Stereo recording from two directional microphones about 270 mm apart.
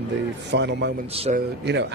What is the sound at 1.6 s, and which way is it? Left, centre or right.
Speech, right.